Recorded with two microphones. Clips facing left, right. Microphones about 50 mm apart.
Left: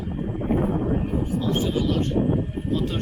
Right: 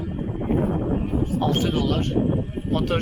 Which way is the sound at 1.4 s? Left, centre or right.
Right.